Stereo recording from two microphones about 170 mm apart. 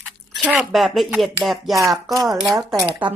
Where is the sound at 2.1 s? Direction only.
20° right (ahead or behind).